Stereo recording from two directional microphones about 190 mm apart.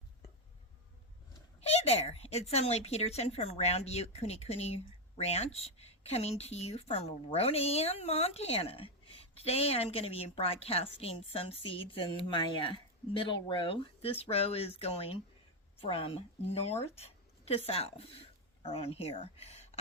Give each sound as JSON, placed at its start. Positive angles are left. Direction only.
{"t": 1.6, "sound": "speech", "side_deg": 35}